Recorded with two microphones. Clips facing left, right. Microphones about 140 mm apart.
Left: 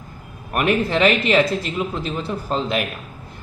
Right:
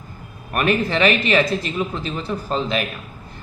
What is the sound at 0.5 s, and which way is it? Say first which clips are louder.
A man's voice: left 1 dB; 15° left (ahead or behind).